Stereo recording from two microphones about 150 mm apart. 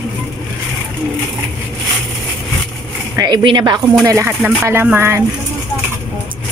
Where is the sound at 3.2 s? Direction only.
30° right (ahead or behind).